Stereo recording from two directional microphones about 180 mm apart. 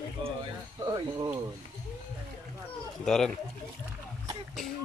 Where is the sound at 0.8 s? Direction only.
20° right (ahead or behind).